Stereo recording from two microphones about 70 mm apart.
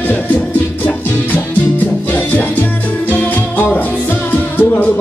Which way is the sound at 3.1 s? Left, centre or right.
Left.